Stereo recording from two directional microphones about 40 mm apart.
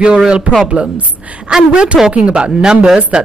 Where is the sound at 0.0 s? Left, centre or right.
Right.